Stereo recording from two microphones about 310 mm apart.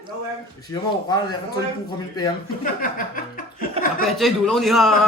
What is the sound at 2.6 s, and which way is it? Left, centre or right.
Speech, left.